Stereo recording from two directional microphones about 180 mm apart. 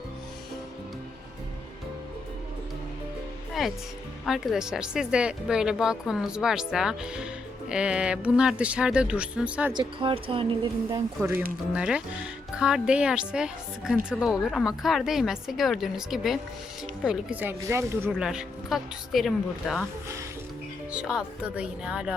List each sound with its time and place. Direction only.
3.6 s speech: centre (ahead or behind)
9.7 s speech: 30° right (ahead or behind)
11.2 s a woman's voice: 10° right (ahead or behind)
18.1 s speech: 5° right (ahead or behind)
20.9 s speech: 5° right (ahead or behind)